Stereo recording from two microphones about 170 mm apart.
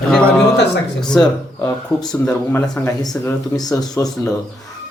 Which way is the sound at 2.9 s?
20° left (ahead or behind).